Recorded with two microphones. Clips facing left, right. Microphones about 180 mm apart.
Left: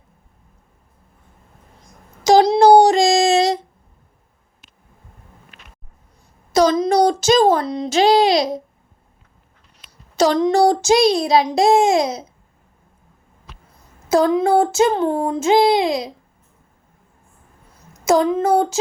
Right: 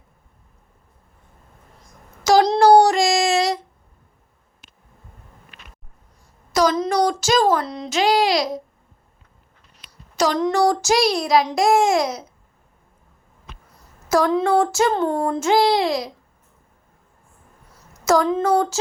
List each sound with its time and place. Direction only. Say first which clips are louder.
2.2 s a sound: left 3 dB; 20° left (ahead or behind)
2.6 s child singing: left 2 dB; 20° left (ahead or behind)
6.5 s a sound: left 3 dB; 25° left (ahead or behind)
6.9 s a child's voice: left 4 dB; 25° left (ahead or behind)
10.2 s a child's voice: left 4 dB; 30° left (ahead or behind)
14.1 s speech: left 3 dB; 30° left (ahead or behind)
14.3 s child singing: left 3 dB; 15° left (ahead or behind)
15.0 s child singing: left 2 dB; 5° left (ahead or behind)
15.4 s a child's voice: left 3 dB; 20° left (ahead or behind)